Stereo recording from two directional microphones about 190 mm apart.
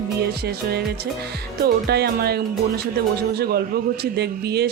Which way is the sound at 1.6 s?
55° right (ahead or behind).